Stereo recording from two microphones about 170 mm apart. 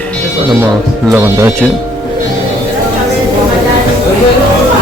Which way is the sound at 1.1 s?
10° right (ahead or behind).